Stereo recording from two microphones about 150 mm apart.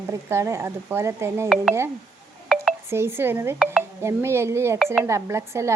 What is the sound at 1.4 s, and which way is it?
Speech, centre (ahead or behind).